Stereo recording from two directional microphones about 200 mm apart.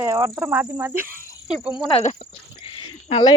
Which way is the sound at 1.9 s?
30° left (ahead or behind).